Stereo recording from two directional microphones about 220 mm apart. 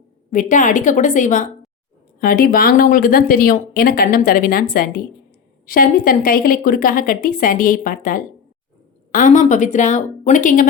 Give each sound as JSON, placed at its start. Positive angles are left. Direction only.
{"t": 0.3, "sound": "speech", "side_deg": 35}